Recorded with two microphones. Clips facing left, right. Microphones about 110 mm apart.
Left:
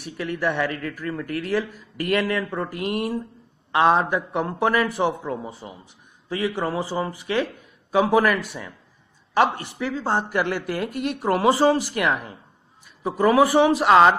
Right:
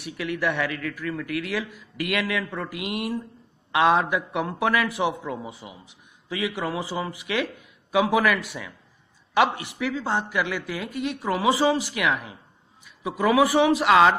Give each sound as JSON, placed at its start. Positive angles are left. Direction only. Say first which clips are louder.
{"t": 0.2, "sound": "a man's voice", "louder": "left 2 dB", "side_deg": 35}
{"t": 10.9, "sound": "speech", "louder": "left 2 dB", "side_deg": 0}
{"t": 11.1, "sound": "speech", "louder": "left 6 dB", "side_deg": 50}
{"t": 11.4, "sound": "a man's voice", "louder": "left 3 dB", "side_deg": 40}
{"t": 13.2, "sound": "a man's voice", "louder": "left 3 dB", "side_deg": 40}